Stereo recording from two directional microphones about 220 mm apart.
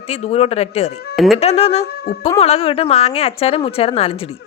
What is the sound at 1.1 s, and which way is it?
Speech, centre (ahead or behind).